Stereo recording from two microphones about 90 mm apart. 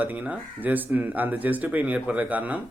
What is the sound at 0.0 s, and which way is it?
Speech, 20° right (ahead or behind).